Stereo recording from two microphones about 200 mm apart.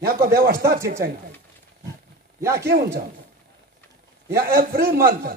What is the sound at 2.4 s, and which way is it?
Speech, 15° right (ahead or behind).